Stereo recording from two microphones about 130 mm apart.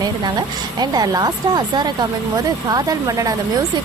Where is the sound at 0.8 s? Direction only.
30° right (ahead or behind).